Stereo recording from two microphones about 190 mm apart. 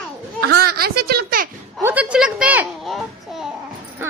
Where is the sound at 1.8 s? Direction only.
10° right (ahead or behind).